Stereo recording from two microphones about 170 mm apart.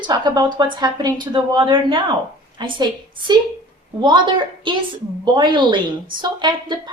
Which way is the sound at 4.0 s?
30° right (ahead or behind).